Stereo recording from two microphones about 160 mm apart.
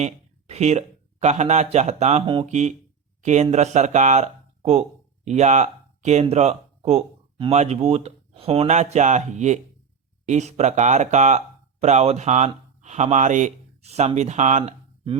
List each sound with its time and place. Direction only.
0.0 s speech: 40° right (ahead or behind)
2.5 s speech: 45° right (ahead or behind)